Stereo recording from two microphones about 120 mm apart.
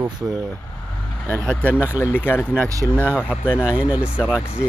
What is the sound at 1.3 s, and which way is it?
Speech, 20° right (ahead or behind).